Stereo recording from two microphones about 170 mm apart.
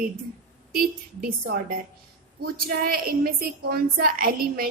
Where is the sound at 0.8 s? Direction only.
60° right (ahead or behind).